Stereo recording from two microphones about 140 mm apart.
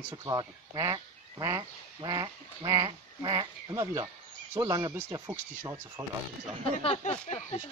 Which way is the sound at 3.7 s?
20° right (ahead or behind).